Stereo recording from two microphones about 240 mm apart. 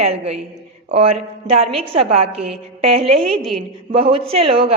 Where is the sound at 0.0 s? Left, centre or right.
Right.